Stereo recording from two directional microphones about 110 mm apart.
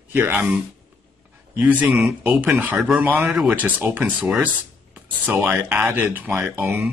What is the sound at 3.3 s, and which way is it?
Speech, 5° right (ahead or behind).